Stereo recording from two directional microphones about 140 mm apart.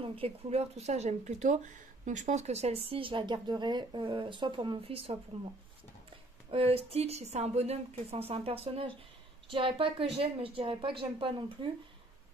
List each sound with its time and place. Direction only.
0.0 s speech: 40° right (ahead or behind)
6.5 s a woman's voice: 45° right (ahead or behind)